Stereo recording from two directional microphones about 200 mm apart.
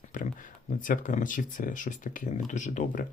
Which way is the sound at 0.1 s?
40° left (ahead or behind).